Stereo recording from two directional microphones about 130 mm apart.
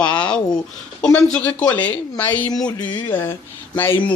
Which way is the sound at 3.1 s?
15° left (ahead or behind).